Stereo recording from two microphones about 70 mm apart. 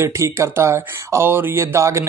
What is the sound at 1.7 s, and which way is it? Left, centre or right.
Speech, right.